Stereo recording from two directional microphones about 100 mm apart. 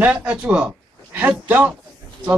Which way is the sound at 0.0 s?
15° right (ahead or behind).